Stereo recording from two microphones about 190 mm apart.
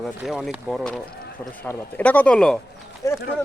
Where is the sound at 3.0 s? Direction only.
15° left (ahead or behind).